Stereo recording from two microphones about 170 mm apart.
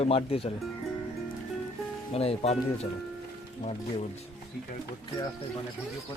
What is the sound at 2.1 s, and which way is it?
Speech, 35° left (ahead or behind).